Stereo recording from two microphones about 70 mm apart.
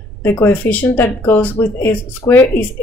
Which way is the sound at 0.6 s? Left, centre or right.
Left.